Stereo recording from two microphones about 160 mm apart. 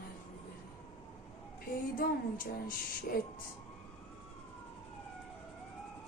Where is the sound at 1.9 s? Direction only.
60° left (ahead or behind).